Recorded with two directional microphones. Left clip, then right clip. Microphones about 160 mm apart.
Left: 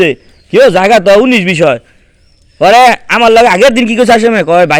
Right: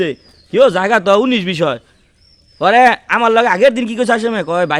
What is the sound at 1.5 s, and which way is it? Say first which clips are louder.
A man's voice: left 8 dB; 10° left (ahead or behind).